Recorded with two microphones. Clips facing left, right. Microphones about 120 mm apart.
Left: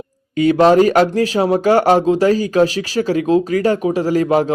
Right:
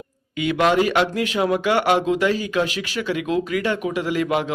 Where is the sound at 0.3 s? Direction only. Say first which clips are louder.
Left 8 dB; 35° left (ahead or behind).